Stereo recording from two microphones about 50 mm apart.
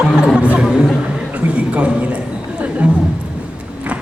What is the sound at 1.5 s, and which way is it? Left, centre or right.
Speech, right.